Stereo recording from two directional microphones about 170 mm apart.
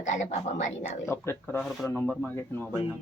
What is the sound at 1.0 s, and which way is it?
Speech, 15° left (ahead or behind).